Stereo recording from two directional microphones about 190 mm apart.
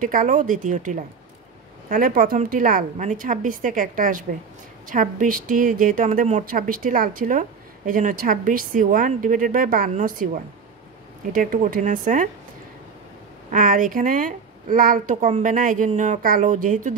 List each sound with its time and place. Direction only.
0.0 s a woman's voice: 45° right (ahead or behind)
13.5 s a woman's voice: 45° right (ahead or behind)